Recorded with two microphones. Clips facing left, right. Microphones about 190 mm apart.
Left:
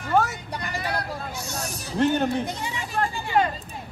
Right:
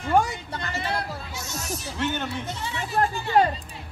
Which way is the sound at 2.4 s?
15° left (ahead or behind).